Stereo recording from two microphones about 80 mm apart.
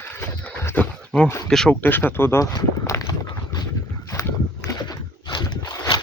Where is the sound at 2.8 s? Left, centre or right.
Left.